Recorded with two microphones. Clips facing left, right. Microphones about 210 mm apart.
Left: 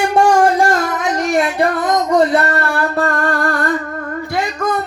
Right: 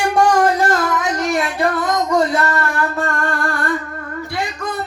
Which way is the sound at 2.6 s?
35° left (ahead or behind).